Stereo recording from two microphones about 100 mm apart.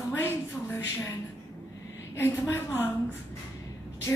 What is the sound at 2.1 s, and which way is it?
Speech, 20° left (ahead or behind).